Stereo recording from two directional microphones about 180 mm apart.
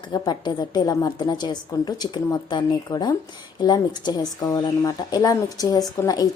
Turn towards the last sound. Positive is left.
turn(degrees=20)  # may be behind; listen again after turning